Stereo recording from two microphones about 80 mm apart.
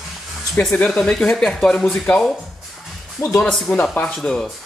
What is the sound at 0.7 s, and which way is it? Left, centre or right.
Speech, centre.